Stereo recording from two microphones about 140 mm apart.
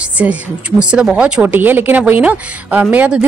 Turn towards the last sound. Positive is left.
turn(degrees=-10)  # may be behind; listen again after turning